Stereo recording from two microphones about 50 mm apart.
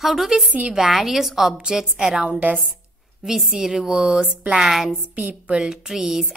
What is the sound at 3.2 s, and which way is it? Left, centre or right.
A woman's voice, centre.